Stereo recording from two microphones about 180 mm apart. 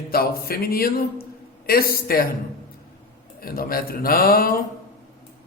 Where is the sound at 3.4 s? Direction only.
55° left (ahead or behind).